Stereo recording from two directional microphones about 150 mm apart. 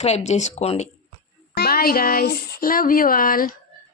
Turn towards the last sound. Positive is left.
turn(degrees=70)  # may be behind; listen again after turning